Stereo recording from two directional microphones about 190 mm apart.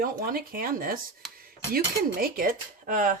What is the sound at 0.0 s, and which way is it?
Speech, 50° right (ahead or behind).